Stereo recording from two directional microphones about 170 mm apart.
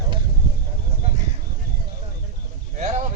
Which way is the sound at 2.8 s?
40° right (ahead or behind).